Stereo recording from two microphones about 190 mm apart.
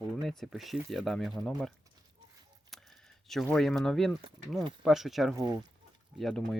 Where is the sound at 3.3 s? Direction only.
Centre (ahead or behind).